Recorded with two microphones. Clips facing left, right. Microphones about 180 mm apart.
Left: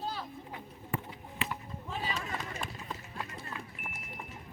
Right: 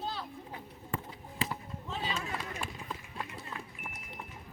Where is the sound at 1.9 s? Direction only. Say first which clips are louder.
Even; 5° left (ahead or behind).